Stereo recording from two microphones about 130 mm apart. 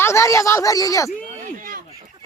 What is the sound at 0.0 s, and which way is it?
Speech, 20° left (ahead or behind).